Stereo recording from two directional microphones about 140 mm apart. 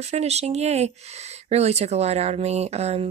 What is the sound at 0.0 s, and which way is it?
Speech, 50° right (ahead or behind).